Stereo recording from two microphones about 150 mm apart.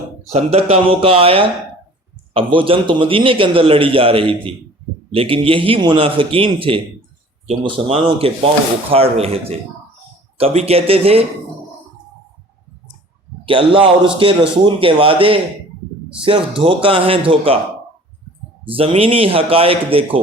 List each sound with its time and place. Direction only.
0.3 s a man's voice: 45° right (ahead or behind)
13.4 s a man's voice: 35° right (ahead or behind)
18.6 s a man's voice: 35° right (ahead or behind)